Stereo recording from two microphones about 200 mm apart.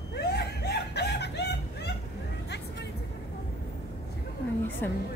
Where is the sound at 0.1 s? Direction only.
55° left (ahead or behind).